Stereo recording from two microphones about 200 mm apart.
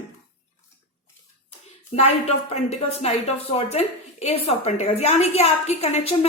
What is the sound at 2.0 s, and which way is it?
Speech, 30° left (ahead or behind).